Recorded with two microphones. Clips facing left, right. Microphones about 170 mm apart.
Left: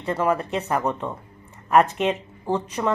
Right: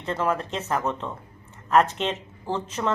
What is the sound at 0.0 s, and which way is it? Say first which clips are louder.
A woman's voice: left 3 dB; 10° left (ahead or behind).